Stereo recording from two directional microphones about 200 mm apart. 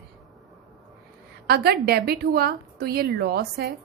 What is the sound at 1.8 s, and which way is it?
A woman's voice, 50° right (ahead or behind).